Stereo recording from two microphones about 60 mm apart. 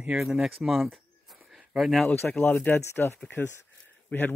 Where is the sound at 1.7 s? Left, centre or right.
Centre.